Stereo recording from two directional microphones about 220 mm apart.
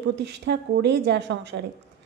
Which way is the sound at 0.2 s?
50° right (ahead or behind).